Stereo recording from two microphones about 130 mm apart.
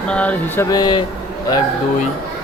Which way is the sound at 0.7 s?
30° left (ahead or behind).